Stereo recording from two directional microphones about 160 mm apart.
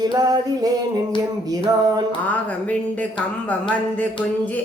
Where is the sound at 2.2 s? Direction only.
10° left (ahead or behind).